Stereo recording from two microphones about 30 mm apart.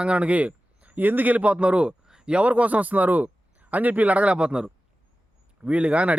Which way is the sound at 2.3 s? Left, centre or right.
Right.